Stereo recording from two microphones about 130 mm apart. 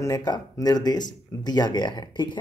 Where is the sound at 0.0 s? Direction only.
30° left (ahead or behind).